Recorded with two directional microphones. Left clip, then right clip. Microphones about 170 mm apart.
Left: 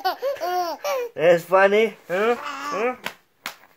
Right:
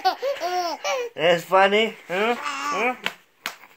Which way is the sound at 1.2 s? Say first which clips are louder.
Left 2 dB; 35° left (ahead or behind).